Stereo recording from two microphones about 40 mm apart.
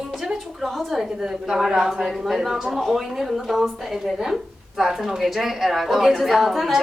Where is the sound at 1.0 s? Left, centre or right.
Centre.